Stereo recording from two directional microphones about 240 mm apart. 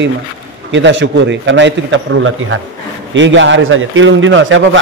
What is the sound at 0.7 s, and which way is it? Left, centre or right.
A man's voice, right.